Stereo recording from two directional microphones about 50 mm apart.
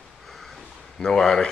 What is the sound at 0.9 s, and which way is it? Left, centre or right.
Speech, centre.